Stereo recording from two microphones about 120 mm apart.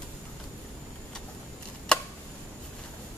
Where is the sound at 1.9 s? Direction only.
5° left (ahead or behind).